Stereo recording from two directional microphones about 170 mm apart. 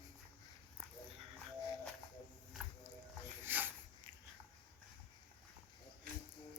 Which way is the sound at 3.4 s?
10° right (ahead or behind).